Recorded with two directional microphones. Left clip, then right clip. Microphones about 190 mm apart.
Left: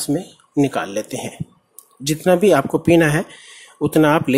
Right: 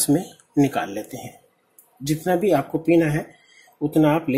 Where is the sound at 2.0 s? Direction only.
20° left (ahead or behind).